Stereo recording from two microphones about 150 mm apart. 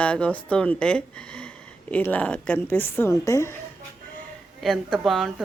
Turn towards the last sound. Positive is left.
turn(degrees=0)  # may be behind; listen again after turning